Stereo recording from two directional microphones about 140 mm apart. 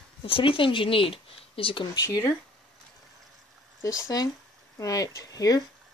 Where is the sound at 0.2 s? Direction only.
40° left (ahead or behind).